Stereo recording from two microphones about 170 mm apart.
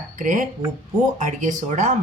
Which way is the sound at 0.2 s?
50° right (ahead or behind).